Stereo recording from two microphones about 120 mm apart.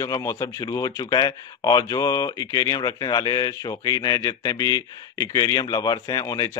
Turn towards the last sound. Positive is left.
turn(degrees=30)  # may be behind; listen again after turning